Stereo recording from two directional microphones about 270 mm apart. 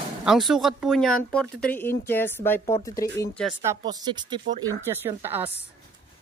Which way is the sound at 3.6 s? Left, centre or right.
Centre.